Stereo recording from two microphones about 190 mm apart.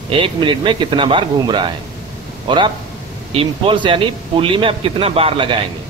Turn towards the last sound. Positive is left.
turn(degrees=-30)  # may be behind; listen again after turning